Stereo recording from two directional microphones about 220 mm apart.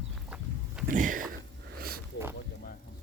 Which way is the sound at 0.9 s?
35° right (ahead or behind).